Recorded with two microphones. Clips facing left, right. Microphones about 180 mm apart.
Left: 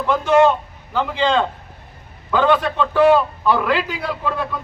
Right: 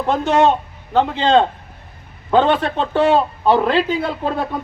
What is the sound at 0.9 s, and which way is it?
Speech, 60° right (ahead or behind).